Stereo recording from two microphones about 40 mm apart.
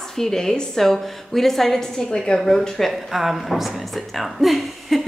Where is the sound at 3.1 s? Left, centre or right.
Centre.